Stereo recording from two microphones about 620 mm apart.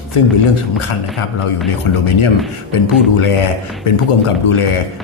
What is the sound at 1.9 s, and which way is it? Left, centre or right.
Speech, left.